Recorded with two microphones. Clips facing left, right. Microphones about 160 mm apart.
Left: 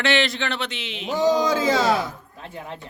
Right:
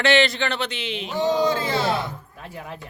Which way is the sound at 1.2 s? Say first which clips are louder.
Left 1 dB; 90° left.